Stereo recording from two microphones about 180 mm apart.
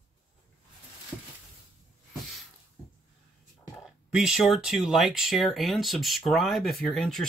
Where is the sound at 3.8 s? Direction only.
5° right (ahead or behind).